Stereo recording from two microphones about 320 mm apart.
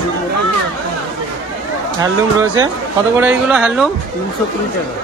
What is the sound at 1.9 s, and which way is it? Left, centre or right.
Speech, centre.